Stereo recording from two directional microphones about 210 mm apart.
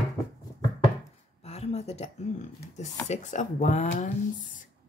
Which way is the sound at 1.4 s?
30° left (ahead or behind).